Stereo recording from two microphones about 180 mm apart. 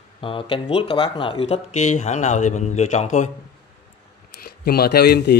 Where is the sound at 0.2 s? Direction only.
30° left (ahead or behind).